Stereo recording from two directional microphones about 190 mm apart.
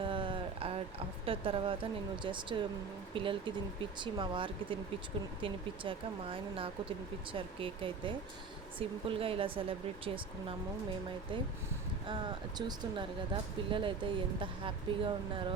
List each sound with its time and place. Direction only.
0.0 s a sound: 25° right (ahead or behind)
3.2 s speech: 25° right (ahead or behind)
12.0 s speech: 25° right (ahead or behind)